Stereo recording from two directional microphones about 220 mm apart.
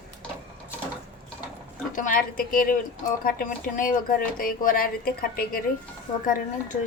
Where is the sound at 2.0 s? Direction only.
35° left (ahead or behind).